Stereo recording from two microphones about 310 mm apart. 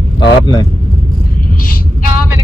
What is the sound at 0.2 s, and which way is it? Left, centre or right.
Speech, centre.